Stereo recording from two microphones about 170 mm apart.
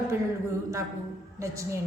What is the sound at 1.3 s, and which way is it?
Speech, 20° right (ahead or behind).